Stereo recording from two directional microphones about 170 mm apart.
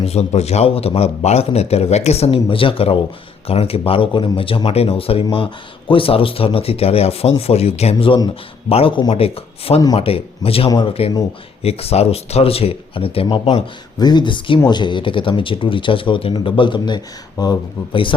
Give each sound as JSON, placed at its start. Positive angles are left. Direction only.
{"t": 0.0, "sound": "a man's voice", "side_deg": 40}